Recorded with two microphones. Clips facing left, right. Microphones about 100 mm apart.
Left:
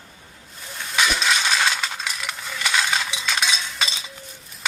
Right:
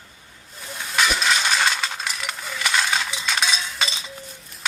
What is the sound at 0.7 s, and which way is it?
Coin, centre (ahead or behind).